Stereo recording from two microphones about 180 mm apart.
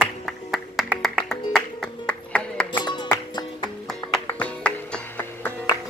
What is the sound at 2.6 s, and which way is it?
Music, 25° left (ahead or behind).